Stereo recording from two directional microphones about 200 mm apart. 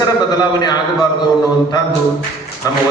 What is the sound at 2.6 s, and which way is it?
Speech, 20° left (ahead or behind).